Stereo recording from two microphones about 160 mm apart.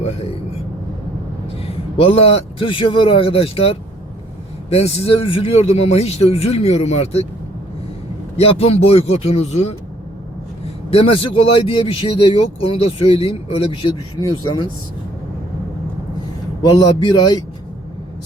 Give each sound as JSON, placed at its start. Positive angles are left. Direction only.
{"t": 2.0, "sound": "speech", "side_deg": 40}
{"t": 8.4, "sound": "speech", "side_deg": 40}
{"t": 10.9, "sound": "a man's voice", "side_deg": 35}
{"t": 16.6, "sound": "a man's voice", "side_deg": 25}